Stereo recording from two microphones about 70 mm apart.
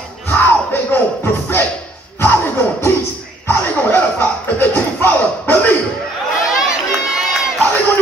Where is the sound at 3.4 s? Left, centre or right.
Left.